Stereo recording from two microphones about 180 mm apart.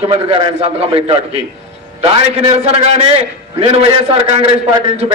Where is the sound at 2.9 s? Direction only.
35° right (ahead or behind).